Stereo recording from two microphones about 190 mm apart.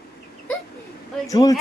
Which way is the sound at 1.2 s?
20° left (ahead or behind).